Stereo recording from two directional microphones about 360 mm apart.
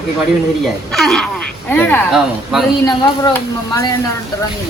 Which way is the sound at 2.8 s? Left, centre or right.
Centre.